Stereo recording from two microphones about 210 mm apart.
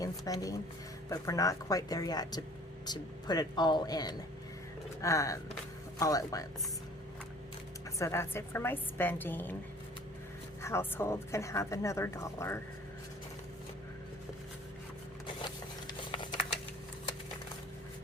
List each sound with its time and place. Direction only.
0.0 s a woman's voice: 15° left (ahead or behind)
7.9 s a woman's voice: 15° left (ahead or behind)
10.6 s a woman's voice: 10° left (ahead or behind)
15.4 s a sound: 20° left (ahead or behind)